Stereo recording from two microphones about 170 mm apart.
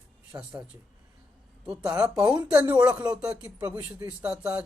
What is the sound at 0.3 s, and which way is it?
Speech, 10° right (ahead or behind).